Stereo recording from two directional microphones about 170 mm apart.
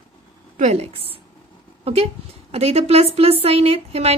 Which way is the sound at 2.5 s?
35° right (ahead or behind).